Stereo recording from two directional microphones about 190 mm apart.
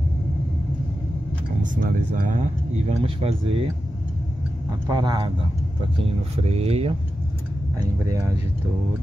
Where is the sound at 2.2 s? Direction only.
40° right (ahead or behind).